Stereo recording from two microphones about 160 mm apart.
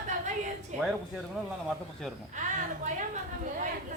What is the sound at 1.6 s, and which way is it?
Speech, centre (ahead or behind).